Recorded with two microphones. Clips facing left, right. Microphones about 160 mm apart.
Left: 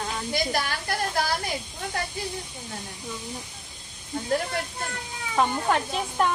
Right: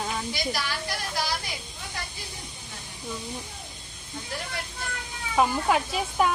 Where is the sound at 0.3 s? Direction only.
50° left (ahead or behind).